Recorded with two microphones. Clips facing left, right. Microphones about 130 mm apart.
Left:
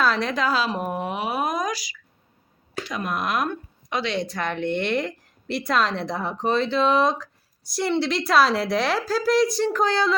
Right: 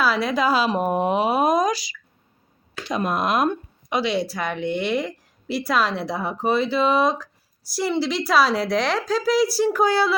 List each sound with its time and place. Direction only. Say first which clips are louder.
0.0 s a woman's voice: right 2 dB; 5° right (ahead or behind)